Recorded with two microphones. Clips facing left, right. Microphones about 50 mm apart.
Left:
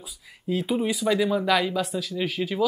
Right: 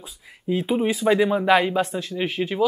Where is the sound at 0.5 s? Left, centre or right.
Right.